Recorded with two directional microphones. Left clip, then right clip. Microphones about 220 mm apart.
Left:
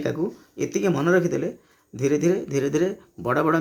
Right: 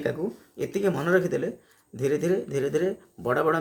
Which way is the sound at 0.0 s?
40° left (ahead or behind).